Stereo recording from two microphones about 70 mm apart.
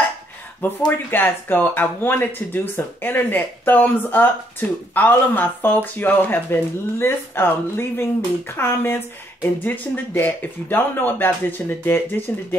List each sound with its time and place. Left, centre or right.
1.1 s speech: left